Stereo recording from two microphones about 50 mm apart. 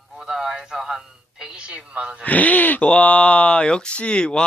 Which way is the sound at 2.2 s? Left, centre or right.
Left.